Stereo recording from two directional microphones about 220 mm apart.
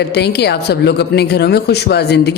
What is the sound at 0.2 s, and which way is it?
A woman's voice, 50° left (ahead or behind).